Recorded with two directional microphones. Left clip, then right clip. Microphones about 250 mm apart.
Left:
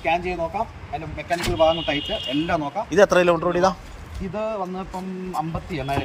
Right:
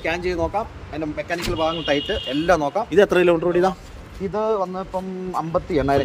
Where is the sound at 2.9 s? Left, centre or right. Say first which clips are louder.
Even; centre.